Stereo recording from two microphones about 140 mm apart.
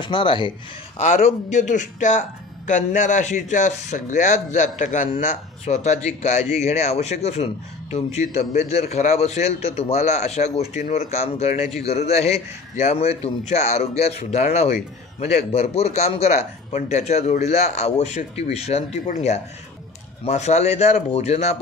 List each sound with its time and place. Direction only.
0.0 s speech: 35° left (ahead or behind)
0.9 s a man's voice: 55° left (ahead or behind)